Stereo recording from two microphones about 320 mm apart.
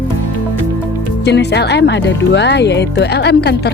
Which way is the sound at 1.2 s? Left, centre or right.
Left.